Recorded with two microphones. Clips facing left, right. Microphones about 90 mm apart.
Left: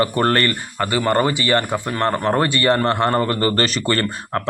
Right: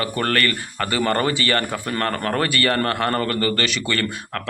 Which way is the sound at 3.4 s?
35° left (ahead or behind).